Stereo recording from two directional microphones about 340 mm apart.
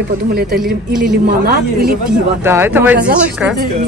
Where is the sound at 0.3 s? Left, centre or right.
Right.